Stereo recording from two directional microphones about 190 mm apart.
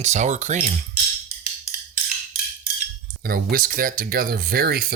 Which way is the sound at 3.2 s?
50° right (ahead or behind).